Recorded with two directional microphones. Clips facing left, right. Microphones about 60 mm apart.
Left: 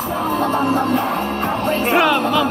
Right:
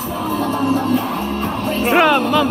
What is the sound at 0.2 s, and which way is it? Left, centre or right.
Speech, left.